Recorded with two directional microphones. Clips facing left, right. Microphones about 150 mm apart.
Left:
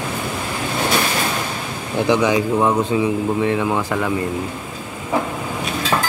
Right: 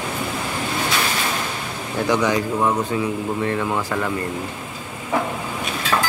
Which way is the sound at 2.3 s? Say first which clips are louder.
Left 3 dB; 15° left (ahead or behind).